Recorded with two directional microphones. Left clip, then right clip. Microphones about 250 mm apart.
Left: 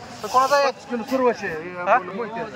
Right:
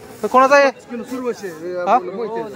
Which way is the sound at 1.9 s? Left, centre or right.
Right.